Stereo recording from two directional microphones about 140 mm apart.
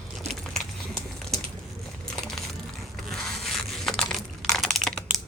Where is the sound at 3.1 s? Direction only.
Centre (ahead or behind).